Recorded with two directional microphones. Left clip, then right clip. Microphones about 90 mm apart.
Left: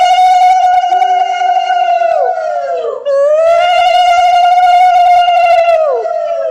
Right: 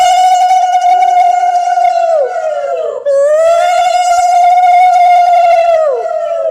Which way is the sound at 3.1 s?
Centre (ahead or behind).